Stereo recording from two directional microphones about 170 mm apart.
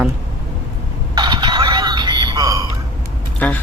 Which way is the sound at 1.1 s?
25° right (ahead or behind).